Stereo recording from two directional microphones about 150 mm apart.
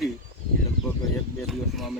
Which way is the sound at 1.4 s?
Centre (ahead or behind).